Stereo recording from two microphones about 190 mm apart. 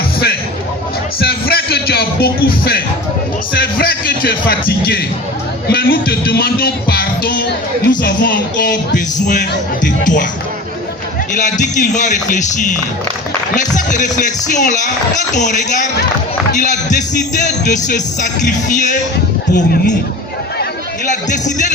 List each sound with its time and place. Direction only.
1.2 s music: 55° left (ahead or behind)
3.5 s speech: 50° left (ahead or behind)
5.6 s music: 55° left (ahead or behind)
8.0 s speech: 50° left (ahead or behind)
9.8 s speech: 45° left (ahead or behind)
11.3 s speech: 40° left (ahead or behind)
19.5 s speech: 60° left (ahead or behind)
21.1 s speech: 40° left (ahead or behind)